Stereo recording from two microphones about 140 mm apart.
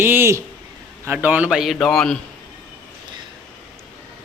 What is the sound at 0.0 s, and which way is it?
A man's voice, 15° right (ahead or behind).